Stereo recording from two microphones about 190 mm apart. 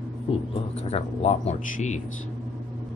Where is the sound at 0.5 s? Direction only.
35° left (ahead or behind).